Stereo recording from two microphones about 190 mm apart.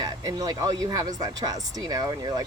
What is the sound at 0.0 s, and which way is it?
Speech, 20° right (ahead or behind).